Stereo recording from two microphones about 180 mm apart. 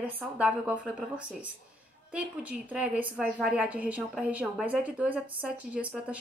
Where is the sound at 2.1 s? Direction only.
5° right (ahead or behind).